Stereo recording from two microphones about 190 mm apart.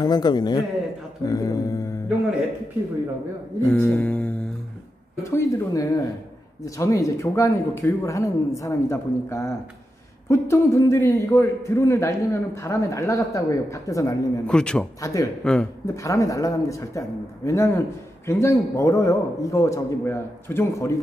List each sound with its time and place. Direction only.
0.0 s a man's voice: 20° left (ahead or behind)
3.6 s a man's voice: 10° left (ahead or behind)
14.4 s a man's voice: 5° left (ahead or behind)
15.0 s a man's voice: 15° left (ahead or behind)
15.4 s a man's voice: 5° left (ahead or behind)
16.0 s a man's voice: 15° left (ahead or behind)